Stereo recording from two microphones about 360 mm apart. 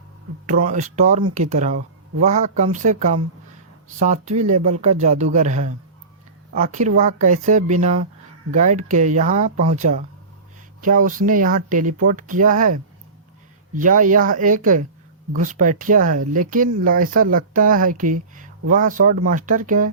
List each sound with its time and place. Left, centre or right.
0.4 s speech: right
13.7 s speech: right